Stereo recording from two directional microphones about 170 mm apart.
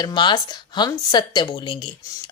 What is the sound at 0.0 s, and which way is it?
Speech, 25° left (ahead or behind).